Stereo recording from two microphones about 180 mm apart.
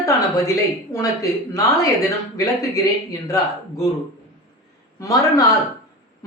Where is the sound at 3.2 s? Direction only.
20° left (ahead or behind).